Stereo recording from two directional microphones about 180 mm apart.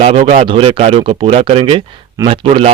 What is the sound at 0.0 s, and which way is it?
Speech, 35° right (ahead or behind).